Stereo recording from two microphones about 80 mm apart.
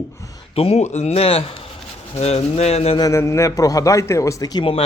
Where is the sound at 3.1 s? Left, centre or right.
Left.